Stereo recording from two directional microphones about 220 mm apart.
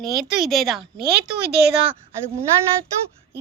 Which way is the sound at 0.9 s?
45° right (ahead or behind).